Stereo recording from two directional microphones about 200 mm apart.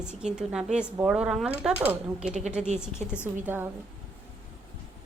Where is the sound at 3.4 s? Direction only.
10° right (ahead or behind).